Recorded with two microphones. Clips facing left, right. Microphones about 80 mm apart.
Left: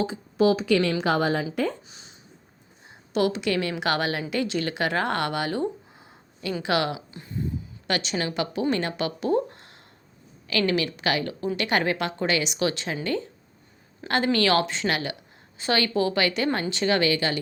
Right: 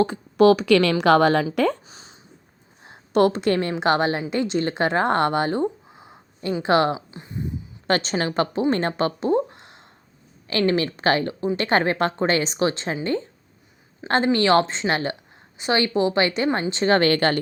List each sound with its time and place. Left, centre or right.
0.0 s a woman's voice: right
1.9 s a sound: right
2.8 s a woman's voice: right
7.9 s a woman's voice: right
10.5 s a woman's voice: right
14.0 s a woman's voice: centre
14.3 s a woman's voice: right
17.1 s speech: right